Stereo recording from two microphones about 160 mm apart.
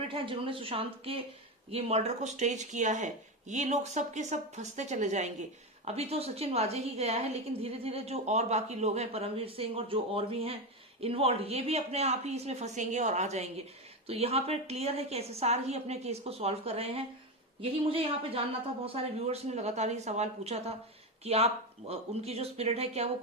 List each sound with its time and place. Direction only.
0.1 s a woman's voice: 35° right (ahead or behind)